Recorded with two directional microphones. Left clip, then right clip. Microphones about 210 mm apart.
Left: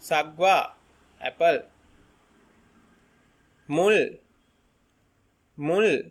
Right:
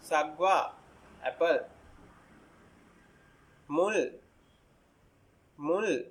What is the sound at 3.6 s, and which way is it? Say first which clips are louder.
Speech: left 7 dB; 40° left (ahead or behind).